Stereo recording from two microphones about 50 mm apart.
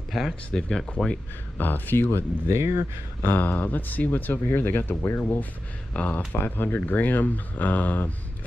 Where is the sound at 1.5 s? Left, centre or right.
Left.